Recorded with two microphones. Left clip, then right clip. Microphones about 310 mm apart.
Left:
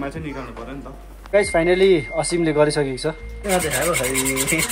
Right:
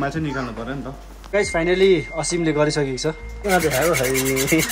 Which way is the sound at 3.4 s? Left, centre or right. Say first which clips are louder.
Right 2 dB; right.